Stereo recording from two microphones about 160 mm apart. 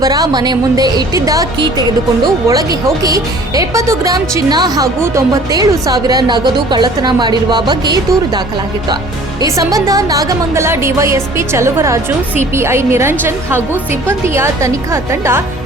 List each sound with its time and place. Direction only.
0.0 s speech: 25° right (ahead or behind)
9.4 s a woman's voice: 20° right (ahead or behind)